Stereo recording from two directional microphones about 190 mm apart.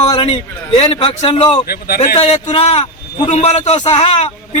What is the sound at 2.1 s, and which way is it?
A man's voice, 35° left (ahead or behind).